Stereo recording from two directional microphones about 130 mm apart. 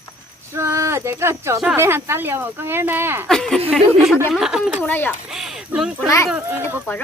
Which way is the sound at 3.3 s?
5° left (ahead or behind).